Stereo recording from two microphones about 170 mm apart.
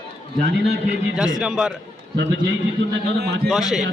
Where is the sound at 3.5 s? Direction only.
Centre (ahead or behind).